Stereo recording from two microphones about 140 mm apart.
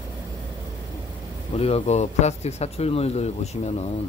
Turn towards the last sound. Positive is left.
turn(degrees=50)  # may be behind; listen again after turning